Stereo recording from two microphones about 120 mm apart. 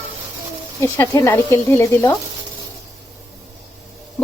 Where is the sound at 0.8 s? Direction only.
25° left (ahead or behind).